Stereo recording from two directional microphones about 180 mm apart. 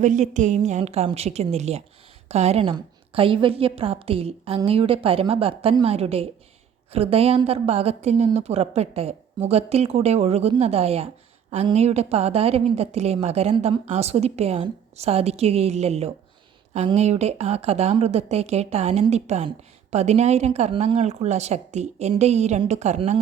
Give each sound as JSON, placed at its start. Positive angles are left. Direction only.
{"t": 0.0, "sound": "a woman's voice", "side_deg": -40}